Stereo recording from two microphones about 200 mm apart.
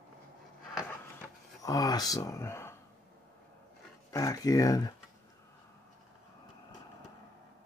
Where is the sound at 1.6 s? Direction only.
15° left (ahead or behind).